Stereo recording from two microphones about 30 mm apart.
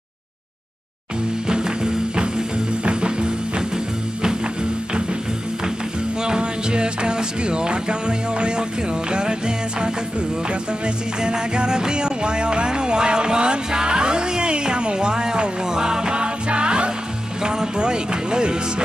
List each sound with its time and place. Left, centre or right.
1.5 s music: right
6.2 s music: right
11.1 s music: right
17.4 s speech: right